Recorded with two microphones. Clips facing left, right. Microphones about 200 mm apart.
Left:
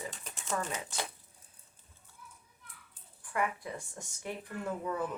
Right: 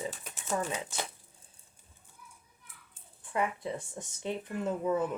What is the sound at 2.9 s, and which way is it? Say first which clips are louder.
Speech: right 3 dB; 25° right (ahead or behind).